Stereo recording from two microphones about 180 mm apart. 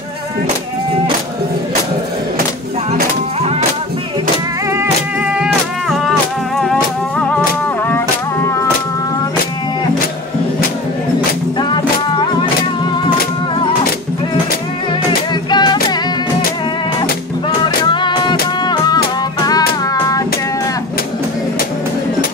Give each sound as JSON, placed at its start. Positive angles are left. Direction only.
{"t": 5.2, "sound": "music", "side_deg": -5}
{"t": 15.5, "sound": "music", "side_deg": 25}
{"t": 17.8, "sound": "music", "side_deg": 25}
{"t": 19.9, "sound": "child singing", "side_deg": 20}